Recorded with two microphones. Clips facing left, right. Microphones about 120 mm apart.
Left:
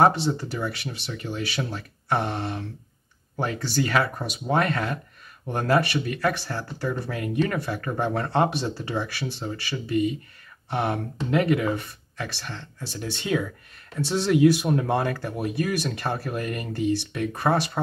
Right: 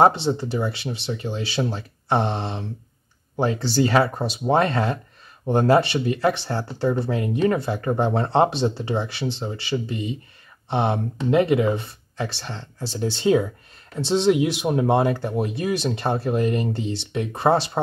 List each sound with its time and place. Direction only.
0.0 s speech: 25° right (ahead or behind)